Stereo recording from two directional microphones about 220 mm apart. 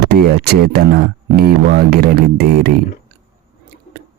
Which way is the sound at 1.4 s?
45° right (ahead or behind).